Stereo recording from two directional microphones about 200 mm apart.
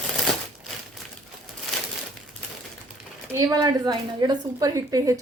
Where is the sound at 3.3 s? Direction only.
20° right (ahead or behind).